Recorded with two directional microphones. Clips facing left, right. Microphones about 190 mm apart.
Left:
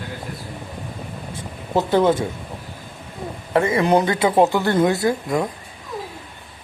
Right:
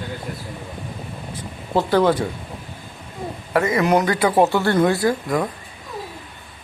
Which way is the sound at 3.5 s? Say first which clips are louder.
Left 1 dB; 30° left (ahead or behind).